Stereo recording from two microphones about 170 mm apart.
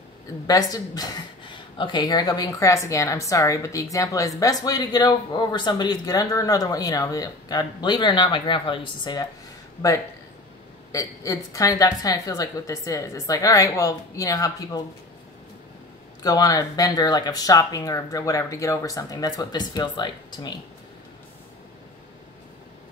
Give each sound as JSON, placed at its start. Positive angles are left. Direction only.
{"t": 0.5, "sound": "a woman's voice", "side_deg": 20}
{"t": 10.9, "sound": "a woman's voice", "side_deg": 20}
{"t": 16.2, "sound": "a woman's voice", "side_deg": 20}